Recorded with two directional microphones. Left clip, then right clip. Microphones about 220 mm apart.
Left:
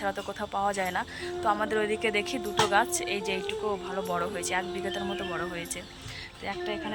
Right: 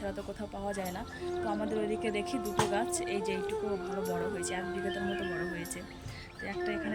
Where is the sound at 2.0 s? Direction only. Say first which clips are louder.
Left 5 dB; 5° right (ahead or behind).